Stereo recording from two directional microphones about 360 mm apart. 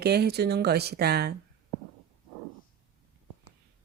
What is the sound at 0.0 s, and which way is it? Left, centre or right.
Speech, right.